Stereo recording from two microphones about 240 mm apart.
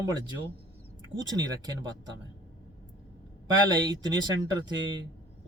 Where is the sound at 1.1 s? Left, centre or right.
Centre.